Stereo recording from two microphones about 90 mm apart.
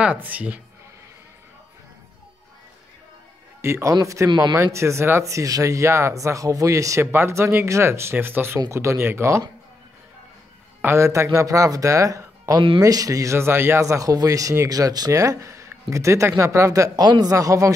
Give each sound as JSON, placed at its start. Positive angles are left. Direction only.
{"t": 0.0, "sound": "speech", "side_deg": -15}
{"t": 3.6, "sound": "speech", "side_deg": -30}
{"t": 4.3, "sound": "speech", "side_deg": -55}
{"t": 4.7, "sound": "speech", "side_deg": -30}
{"t": 10.8, "sound": "speech", "side_deg": -30}